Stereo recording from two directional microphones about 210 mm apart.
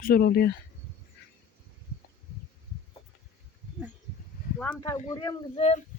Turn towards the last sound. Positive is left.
turn(degrees=20)  # may be behind; listen again after turning